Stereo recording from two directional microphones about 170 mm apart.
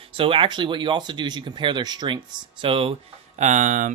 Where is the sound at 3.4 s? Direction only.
45° right (ahead or behind).